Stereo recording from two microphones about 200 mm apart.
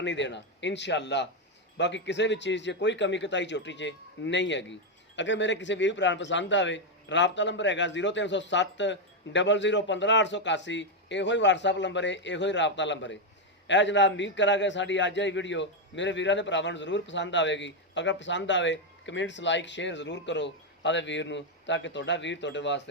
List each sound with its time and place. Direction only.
0.0 s a man's voice: 65° left (ahead or behind)